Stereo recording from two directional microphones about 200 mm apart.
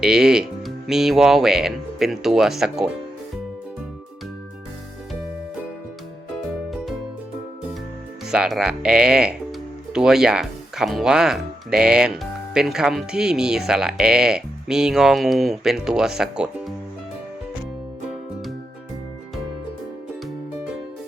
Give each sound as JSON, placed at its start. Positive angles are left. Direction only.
{"t": 0.0, "sound": "speech", "side_deg": -5}
{"t": 8.3, "sound": "speech", "side_deg": -5}